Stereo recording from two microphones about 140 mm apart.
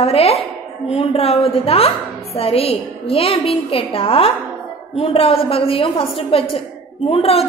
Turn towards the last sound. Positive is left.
turn(degrees=45)  # may be behind; listen again after turning